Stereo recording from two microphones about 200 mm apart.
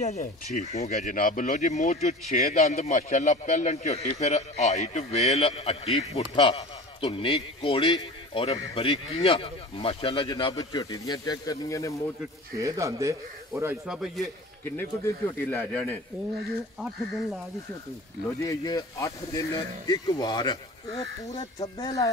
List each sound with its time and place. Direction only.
0.0 s a man's voice: 35° left (ahead or behind); by 12.0 s 15° left (ahead or behind)
12.5 s speech: 15° right (ahead or behind)
13.8 s speech: centre (ahead or behind)
14.6 s a man's voice: 10° left (ahead or behind)
18.4 s speech: 20° left (ahead or behind)